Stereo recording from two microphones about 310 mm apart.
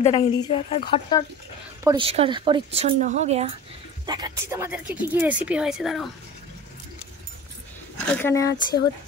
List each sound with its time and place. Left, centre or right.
0.0 s a woman's voice: centre
1.9 s a woman's voice: centre
8.1 s a woman's voice: centre